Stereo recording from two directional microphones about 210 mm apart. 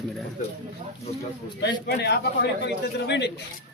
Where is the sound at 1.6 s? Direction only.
55° left (ahead or behind).